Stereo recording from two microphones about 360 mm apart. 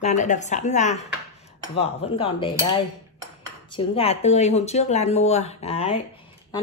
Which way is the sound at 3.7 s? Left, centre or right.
Centre.